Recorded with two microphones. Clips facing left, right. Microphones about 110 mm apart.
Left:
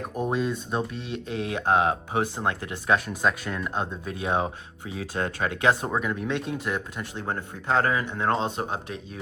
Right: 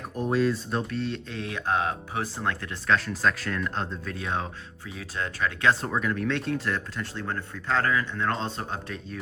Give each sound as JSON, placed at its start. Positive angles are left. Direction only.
{"t": 0.3, "sound": "speech", "side_deg": 5}
{"t": 1.5, "sound": "speech", "side_deg": 20}
{"t": 4.9, "sound": "speech", "side_deg": 45}
{"t": 5.8, "sound": "speech", "side_deg": 10}
{"t": 6.7, "sound": "speech", "side_deg": 25}